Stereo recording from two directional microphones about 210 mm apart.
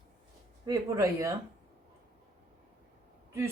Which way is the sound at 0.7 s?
15° right (ahead or behind).